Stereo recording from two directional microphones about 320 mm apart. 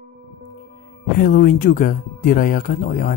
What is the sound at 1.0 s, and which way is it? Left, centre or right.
Speech, left.